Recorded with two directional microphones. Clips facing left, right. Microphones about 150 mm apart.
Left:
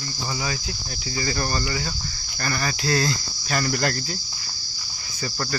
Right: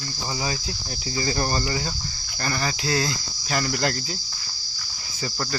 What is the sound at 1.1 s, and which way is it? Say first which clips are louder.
Cricket: right 1 dB; 25° right (ahead or behind).